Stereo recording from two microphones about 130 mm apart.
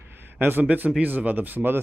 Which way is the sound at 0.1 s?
15° right (ahead or behind).